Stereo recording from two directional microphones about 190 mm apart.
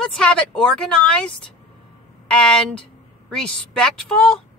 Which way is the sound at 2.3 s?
5° left (ahead or behind).